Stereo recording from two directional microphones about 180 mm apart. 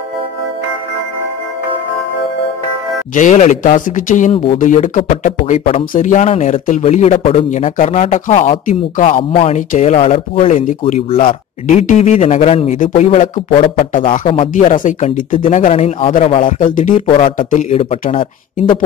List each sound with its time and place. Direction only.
3.2 s speech: 45° left (ahead or behind)
4.3 s speech: 30° left (ahead or behind)
4.6 s speech: 45° left (ahead or behind)
12.7 s speech: 45° left (ahead or behind)
14.5 s speech: 40° left (ahead or behind)
16.5 s speech: 45° left (ahead or behind)
17.0 s speech: 30° left (ahead or behind)
17.4 s speech: 45° left (ahead or behind)